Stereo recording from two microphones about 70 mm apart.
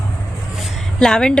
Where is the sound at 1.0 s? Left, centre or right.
Centre.